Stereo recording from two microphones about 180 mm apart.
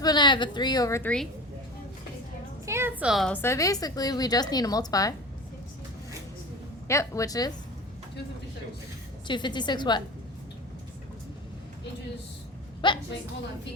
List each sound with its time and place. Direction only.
0.0 s a woman's voice: 25° left (ahead or behind)
2.6 s a sound: 15° right (ahead or behind)
3.0 s a woman's voice: centre (ahead or behind); by 5.1 s 20° left (ahead or behind)
6.8 s speech: 15° left (ahead or behind)
9.2 s a woman's voice: 25° left (ahead or behind)
12.8 s a woman's voice: 25° left (ahead or behind)